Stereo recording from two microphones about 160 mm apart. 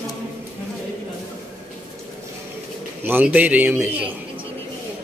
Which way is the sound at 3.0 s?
10° right (ahead or behind).